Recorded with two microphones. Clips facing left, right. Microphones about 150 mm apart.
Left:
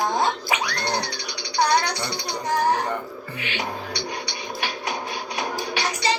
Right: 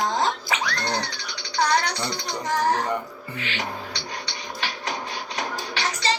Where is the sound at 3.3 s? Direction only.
15° left (ahead or behind).